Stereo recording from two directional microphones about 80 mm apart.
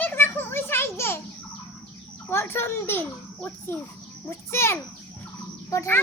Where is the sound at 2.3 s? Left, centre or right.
Left.